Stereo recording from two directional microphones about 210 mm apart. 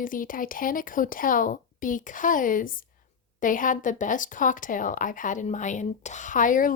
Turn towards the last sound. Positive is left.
turn(degrees=40)  # may be behind; listen again after turning